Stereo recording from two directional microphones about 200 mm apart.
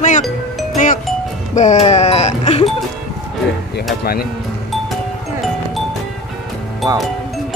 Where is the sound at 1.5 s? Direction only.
35° left (ahead or behind).